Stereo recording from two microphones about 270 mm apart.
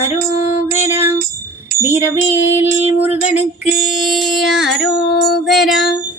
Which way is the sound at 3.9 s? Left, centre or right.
Centre.